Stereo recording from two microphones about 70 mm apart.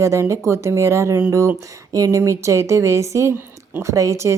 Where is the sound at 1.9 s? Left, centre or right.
Right.